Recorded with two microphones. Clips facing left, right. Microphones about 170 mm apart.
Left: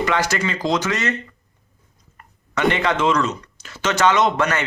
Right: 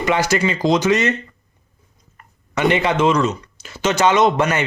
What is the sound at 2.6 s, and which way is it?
Speech, 15° right (ahead or behind).